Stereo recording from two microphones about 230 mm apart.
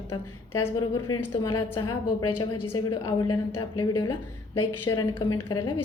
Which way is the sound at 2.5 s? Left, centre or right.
Left.